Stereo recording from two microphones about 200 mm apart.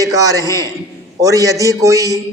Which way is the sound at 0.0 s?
15° right (ahead or behind).